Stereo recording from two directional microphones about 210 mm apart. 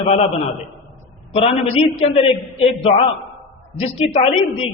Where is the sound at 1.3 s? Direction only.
30° left (ahead or behind).